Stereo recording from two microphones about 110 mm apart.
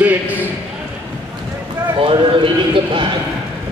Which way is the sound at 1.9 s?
50° right (ahead or behind).